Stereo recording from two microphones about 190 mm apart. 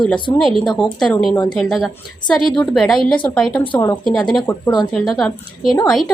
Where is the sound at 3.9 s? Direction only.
Centre (ahead or behind).